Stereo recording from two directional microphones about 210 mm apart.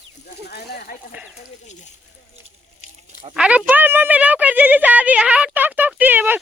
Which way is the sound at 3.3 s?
5° right (ahead or behind).